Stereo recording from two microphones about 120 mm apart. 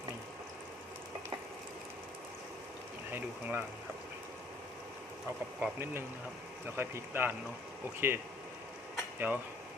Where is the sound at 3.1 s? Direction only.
15° right (ahead or behind).